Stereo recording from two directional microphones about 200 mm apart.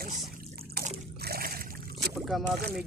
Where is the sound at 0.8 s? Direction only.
50° right (ahead or behind).